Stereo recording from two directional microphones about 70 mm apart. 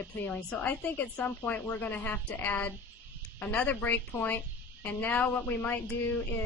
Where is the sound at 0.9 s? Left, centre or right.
Left.